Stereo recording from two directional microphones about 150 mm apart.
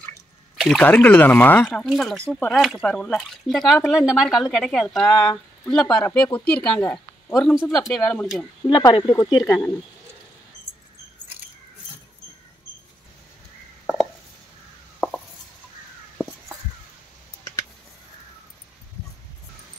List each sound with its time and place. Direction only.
0.6 s speech: 5° left (ahead or behind)
7.3 s speech: centre (ahead or behind)
7.6 s speech: 20° left (ahead or behind)
7.9 s speech: 5° left (ahead or behind)
8.6 s speech: 30° left (ahead or behind)